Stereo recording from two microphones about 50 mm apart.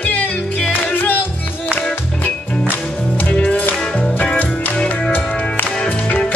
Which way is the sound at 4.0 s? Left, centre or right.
Centre.